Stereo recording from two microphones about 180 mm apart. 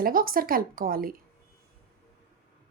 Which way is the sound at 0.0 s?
50° right (ahead or behind).